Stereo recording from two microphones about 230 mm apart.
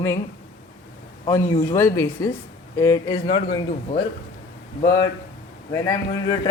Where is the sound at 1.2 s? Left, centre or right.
Centre.